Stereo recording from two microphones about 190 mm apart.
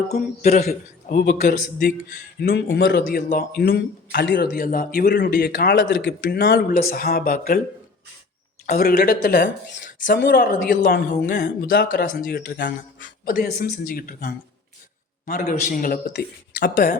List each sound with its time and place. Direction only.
0.1 s a woman's voice: 55° left (ahead or behind)
3.0 s a woman's voice: 45° left (ahead or behind)
8.7 s a woman's voice: 50° left (ahead or behind)